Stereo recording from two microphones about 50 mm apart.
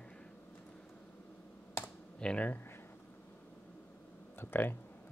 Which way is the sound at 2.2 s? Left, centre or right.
Left.